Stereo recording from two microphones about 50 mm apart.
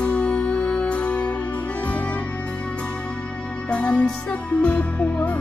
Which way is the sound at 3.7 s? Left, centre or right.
Left.